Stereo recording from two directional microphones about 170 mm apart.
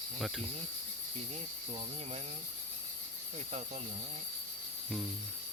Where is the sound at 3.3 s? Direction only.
40° right (ahead or behind).